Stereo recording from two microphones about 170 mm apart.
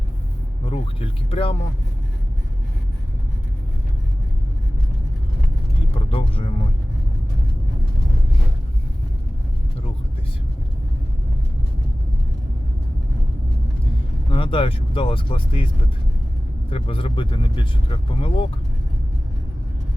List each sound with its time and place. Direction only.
0.6 s speech: 35° left (ahead or behind)
6.1 s speech: 35° left (ahead or behind)
14.3 s speech: 30° left (ahead or behind)
16.6 s speech: 30° left (ahead or behind)